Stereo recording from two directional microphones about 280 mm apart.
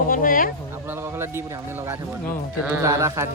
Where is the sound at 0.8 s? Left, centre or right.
Centre.